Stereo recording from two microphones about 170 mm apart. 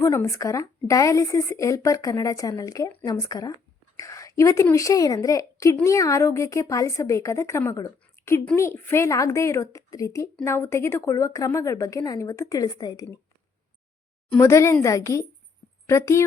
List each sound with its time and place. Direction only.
0.0 s a woman's voice: 15° left (ahead or behind)
14.3 s a woman's voice: 15° left (ahead or behind)